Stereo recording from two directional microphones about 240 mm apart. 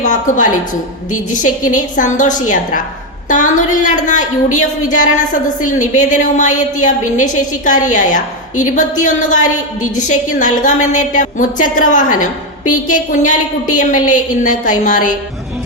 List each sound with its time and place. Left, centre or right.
0.0 s a woman's voice: left